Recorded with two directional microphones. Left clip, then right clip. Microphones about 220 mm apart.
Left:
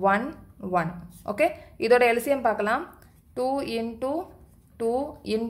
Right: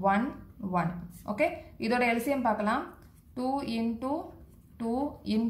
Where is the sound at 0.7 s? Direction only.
50° left (ahead or behind).